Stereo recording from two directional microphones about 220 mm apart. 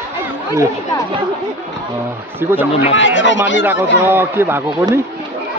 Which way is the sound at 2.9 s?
55° left (ahead or behind).